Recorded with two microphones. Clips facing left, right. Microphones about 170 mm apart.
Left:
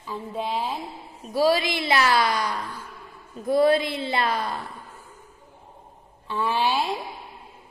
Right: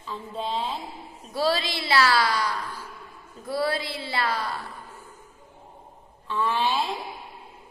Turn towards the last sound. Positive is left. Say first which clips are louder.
# left 1 dB
turn(degrees=10)  # may be behind; listen again after turning